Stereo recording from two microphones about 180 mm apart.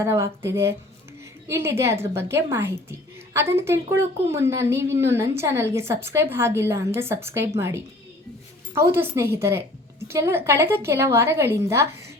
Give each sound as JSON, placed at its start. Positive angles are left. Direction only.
{"t": 0.0, "sound": "a woman's voice", "side_deg": -15}